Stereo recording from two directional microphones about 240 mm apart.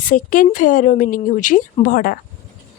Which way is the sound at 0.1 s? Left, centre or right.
Left.